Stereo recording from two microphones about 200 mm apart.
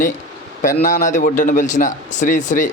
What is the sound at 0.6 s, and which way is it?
A man's voice, 40° left (ahead or behind).